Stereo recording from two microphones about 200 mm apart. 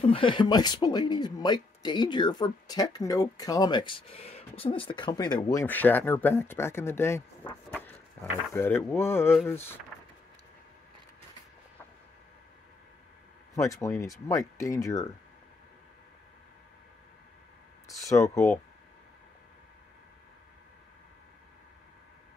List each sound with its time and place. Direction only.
0.0 s speech: 25° left (ahead or behind)
13.6 s speech: 15° left (ahead or behind)
17.8 s speech: 15° left (ahead or behind)